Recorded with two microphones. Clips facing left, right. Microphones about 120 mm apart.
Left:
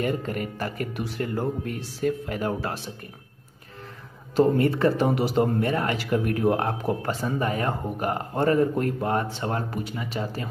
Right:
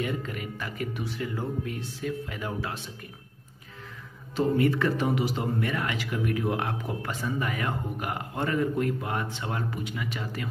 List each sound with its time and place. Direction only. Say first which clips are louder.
0.0 s speech: left 5 dB; 45° left (ahead or behind)
4.4 s a man's voice: left 4 dB; 35° left (ahead or behind)